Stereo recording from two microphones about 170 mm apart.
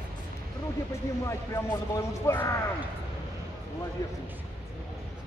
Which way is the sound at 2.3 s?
15° left (ahead or behind).